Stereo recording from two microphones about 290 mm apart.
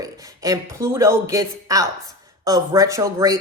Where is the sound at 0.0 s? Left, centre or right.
Centre.